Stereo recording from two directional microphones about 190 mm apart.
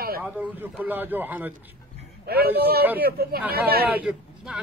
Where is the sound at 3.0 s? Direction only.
50° right (ahead or behind).